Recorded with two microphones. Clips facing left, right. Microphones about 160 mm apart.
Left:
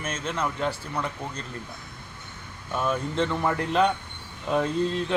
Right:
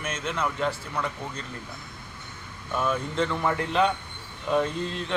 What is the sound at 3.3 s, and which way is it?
Speech, centre (ahead or behind).